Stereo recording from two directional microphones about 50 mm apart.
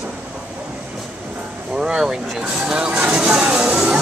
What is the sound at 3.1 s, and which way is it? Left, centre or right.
Music, centre.